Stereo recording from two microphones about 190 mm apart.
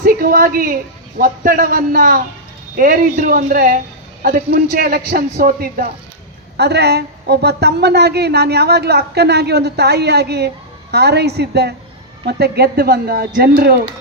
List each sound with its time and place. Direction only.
0.0 s a woman's voice: 50° right (ahead or behind)